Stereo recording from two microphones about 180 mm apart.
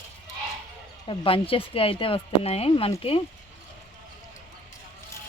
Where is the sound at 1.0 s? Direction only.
30° left (ahead or behind).